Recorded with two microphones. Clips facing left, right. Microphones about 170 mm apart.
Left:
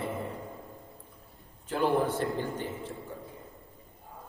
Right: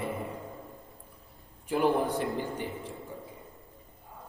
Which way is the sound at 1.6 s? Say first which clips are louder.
Right 1 dB; 15° right (ahead or behind).